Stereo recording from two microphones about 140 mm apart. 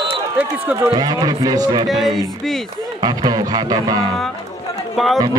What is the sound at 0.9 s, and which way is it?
Speech, 30° right (ahead or behind).